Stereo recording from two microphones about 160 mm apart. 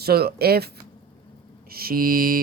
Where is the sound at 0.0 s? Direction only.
75° right (ahead or behind).